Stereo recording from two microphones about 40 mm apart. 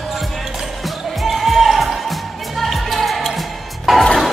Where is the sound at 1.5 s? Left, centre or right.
Centre.